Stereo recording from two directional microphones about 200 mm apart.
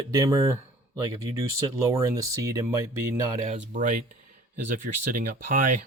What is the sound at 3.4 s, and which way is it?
A man's voice, 35° right (ahead or behind).